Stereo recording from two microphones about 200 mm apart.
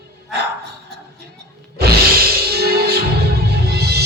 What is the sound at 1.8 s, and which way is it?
Music, 50° right (ahead or behind).